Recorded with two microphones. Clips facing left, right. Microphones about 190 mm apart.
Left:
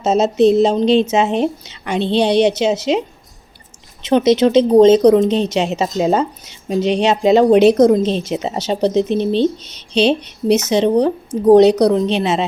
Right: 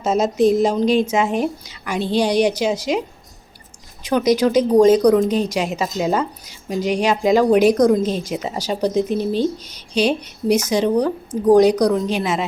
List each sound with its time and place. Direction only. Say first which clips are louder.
0.0 s a woman's voice: left 4 dB; 25° left (ahead or behind)
4.0 s a woman's voice: left 4 dB; 25° left (ahead or behind)